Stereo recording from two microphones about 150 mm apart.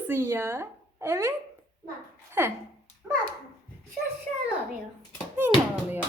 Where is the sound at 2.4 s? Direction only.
15° right (ahead or behind).